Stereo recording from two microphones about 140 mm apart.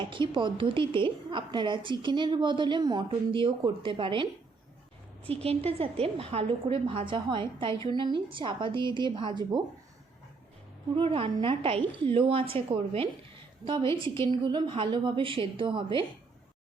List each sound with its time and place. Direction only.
0.0 s a woman's voice: 35° right (ahead or behind)
5.3 s a woman's voice: 45° right (ahead or behind)
10.9 s a woman's voice: 40° right (ahead or behind)